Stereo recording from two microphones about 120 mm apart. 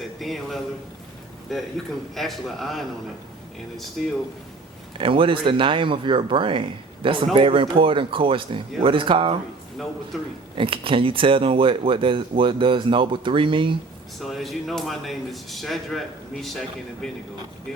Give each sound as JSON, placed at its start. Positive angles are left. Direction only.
{"t": 0.2, "sound": "speech", "side_deg": 0}
{"t": 4.0, "sound": "speech", "side_deg": 0}
{"t": 4.9, "sound": "speech", "side_deg": -45}
{"t": 10.1, "sound": "speech", "side_deg": 0}
{"t": 10.5, "sound": "speech", "side_deg": -45}
{"t": 14.2, "sound": "speech", "side_deg": 0}